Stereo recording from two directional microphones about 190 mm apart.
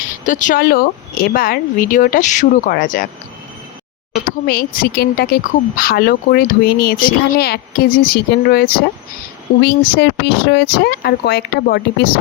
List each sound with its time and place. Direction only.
0.0 s speech: 45° left (ahead or behind)
4.2 s speech: 50° left (ahead or behind)